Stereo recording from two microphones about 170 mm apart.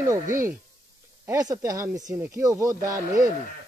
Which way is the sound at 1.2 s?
20° right (ahead or behind).